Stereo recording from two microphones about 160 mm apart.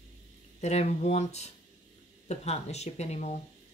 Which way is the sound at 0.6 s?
45° left (ahead or behind).